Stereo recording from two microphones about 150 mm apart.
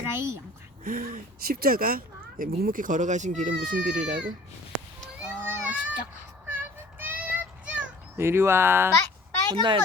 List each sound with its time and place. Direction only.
0.1 s speech: 15° right (ahead or behind)
0.9 s speech: 60° right (ahead or behind)
5.2 s children playing: 15° right (ahead or behind)
6.5 s child singing: 15° right (ahead or behind)
9.6 s a child's voice: 30° right (ahead or behind)